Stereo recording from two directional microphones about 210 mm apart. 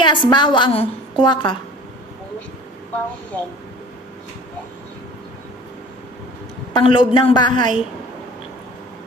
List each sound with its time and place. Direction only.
0.0 s a woman's voice: 20° left (ahead or behind)
6.7 s a woman's voice: 20° left (ahead or behind)
7.5 s a woman's voice: 35° right (ahead or behind)